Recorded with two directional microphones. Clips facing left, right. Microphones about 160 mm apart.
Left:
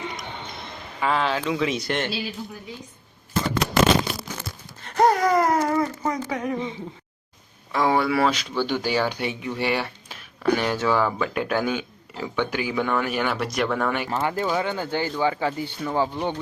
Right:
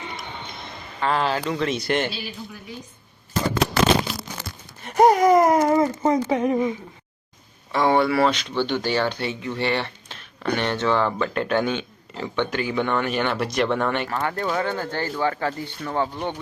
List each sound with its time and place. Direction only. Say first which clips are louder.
1.0 s speech: right 1 dB; centre (ahead or behind)
4.8 s a sound: right 3 dB; 15° right (ahead or behind)
7.7 s speech: right 2 dB; centre (ahead or behind)
14.1 s speech: left 1 dB; 20° left (ahead or behind)
14.3 s speech: even; 5° left (ahead or behind)